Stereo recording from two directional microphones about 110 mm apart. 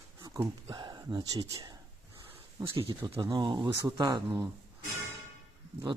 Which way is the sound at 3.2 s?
40° right (ahead or behind).